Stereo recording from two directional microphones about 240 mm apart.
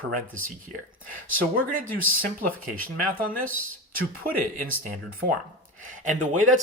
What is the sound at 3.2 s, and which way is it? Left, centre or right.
Speech, right.